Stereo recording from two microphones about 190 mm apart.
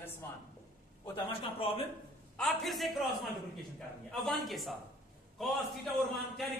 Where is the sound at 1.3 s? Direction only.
30° left (ahead or behind).